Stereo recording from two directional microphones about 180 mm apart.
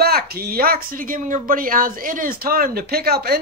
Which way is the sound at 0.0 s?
60° right (ahead or behind).